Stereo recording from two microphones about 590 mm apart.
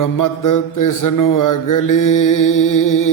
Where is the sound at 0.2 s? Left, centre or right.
Left.